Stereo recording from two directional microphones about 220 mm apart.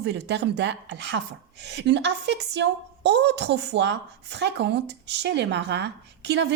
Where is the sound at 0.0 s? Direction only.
50° right (ahead or behind).